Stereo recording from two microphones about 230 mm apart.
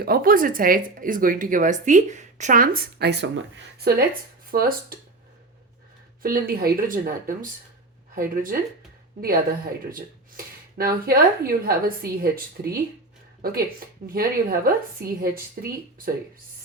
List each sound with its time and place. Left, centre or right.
0.0 s speech: right
4.5 s speech: right
6.2 s speech: right
9.9 s speech: right